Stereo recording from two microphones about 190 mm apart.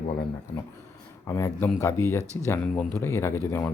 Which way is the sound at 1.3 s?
15° left (ahead or behind).